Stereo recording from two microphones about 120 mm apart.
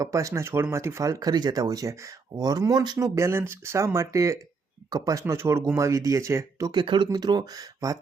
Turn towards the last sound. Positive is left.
turn(degrees=-30)  # may be behind; listen again after turning